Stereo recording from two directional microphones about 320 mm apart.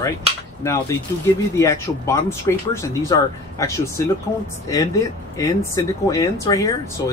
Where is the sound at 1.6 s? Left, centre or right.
Centre.